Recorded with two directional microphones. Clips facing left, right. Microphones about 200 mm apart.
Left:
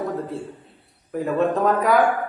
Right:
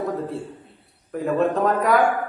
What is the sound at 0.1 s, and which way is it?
A man's voice, centre (ahead or behind).